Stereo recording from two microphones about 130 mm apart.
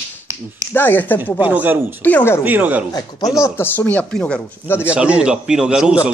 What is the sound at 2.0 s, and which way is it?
Speech, 10° left (ahead or behind).